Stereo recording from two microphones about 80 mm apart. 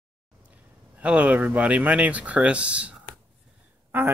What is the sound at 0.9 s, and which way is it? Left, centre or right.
Speech, centre.